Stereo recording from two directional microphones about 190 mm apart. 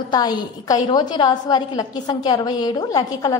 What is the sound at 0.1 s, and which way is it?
A woman's voice, 20° left (ahead or behind).